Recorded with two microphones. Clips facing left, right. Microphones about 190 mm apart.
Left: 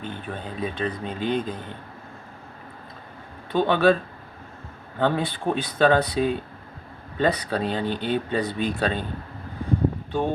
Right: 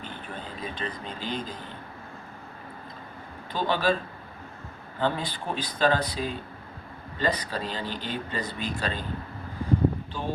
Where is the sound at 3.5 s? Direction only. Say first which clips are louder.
Left 6 dB; 55° left (ahead or behind).